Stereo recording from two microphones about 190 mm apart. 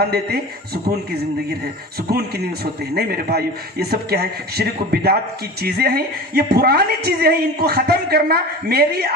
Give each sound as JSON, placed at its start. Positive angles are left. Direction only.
{"t": 0.0, "sound": "a woman's voice", "side_deg": -55}
{"t": 2.9, "sound": "a woman's voice", "side_deg": -55}